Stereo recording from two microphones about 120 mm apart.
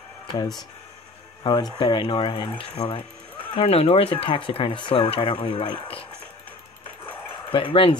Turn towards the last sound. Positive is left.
turn(degrees=45)  # may be behind; listen again after turning